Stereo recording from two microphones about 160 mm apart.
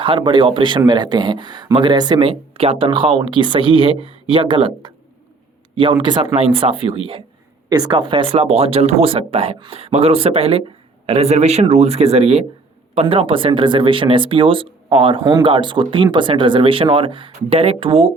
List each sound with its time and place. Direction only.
0.0 s speech: 30° right (ahead or behind)